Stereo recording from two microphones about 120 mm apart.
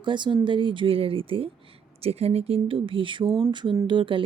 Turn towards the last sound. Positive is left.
turn(degrees=-45)  # may be behind; listen again after turning